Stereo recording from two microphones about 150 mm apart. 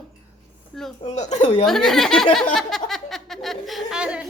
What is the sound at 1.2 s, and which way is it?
Speech, 50° left (ahead or behind).